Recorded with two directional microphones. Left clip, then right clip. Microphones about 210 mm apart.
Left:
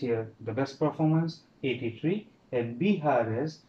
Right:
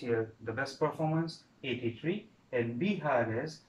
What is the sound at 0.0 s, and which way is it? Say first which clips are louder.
Speech: left 2 dB; 20° left (ahead or behind).